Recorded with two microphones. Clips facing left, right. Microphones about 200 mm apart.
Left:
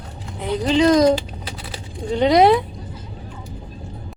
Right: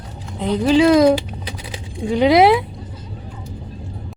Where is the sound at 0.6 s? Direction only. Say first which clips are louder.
Right 2 dB; 10° right (ahead or behind).